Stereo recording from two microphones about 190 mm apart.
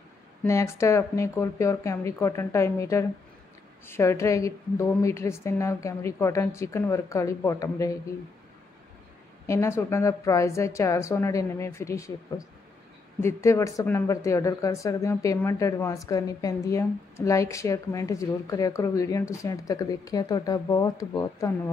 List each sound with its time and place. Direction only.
0.4 s speech: 15° left (ahead or behind)
9.5 s speech: 15° left (ahead or behind)